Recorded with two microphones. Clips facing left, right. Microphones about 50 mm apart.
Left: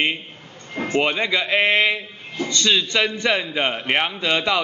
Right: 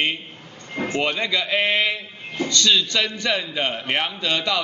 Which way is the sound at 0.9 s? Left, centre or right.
Centre.